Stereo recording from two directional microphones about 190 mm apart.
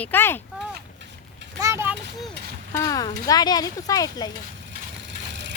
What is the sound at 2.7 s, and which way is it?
Speech, 15° left (ahead or behind).